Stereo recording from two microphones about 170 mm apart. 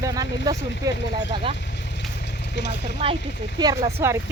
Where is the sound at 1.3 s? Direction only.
30° right (ahead or behind).